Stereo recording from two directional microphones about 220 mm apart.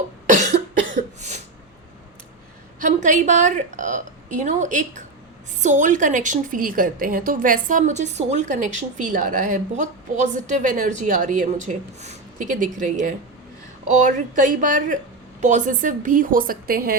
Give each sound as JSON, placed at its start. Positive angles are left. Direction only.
{"t": 0.5, "sound": "cough", "side_deg": -35}
{"t": 2.8, "sound": "a woman's voice", "side_deg": -35}